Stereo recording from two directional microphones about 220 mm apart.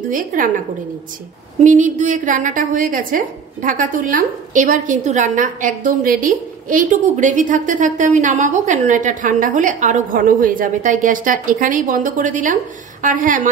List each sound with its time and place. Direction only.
0.1 s a woman's voice: 35° right (ahead or behind)
1.6 s a woman's voice: 35° right (ahead or behind)